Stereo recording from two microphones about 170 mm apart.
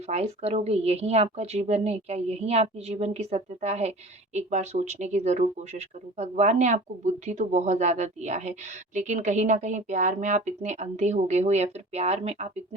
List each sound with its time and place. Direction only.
0.1 s a woman's voice: 40° right (ahead or behind)